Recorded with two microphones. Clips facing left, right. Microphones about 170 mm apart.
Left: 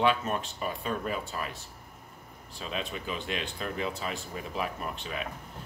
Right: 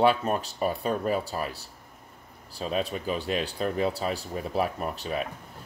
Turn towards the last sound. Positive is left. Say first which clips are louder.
# right 5 dB
turn(degrees=-40)  # may be behind; listen again after turning